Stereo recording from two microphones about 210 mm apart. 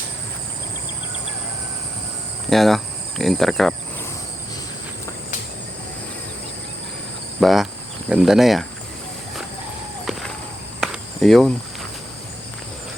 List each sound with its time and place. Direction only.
2.5 s cricket: centre (ahead or behind)
7.3 s speech: centre (ahead or behind)
10.1 s a sound: centre (ahead or behind)
10.8 s cricket: centre (ahead or behind)